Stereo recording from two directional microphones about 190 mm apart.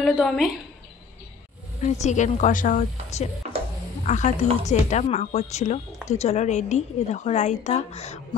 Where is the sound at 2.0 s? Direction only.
40° left (ahead or behind).